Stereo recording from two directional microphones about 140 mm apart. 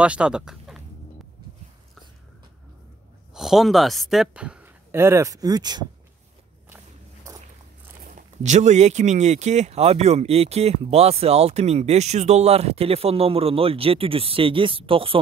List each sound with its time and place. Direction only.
0.0 s speech: 10° right (ahead or behind)
3.3 s a woman's voice: centre (ahead or behind); by 5.9 s 30° right (ahead or behind)
8.4 s speech: 55° right (ahead or behind); by 15.1 s 40° right (ahead or behind)